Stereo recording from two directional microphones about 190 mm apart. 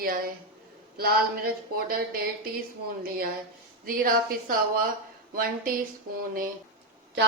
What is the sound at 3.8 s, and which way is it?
Speech, 50° right (ahead or behind).